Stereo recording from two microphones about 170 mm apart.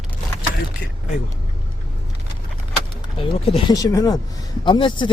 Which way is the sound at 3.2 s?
35° left (ahead or behind).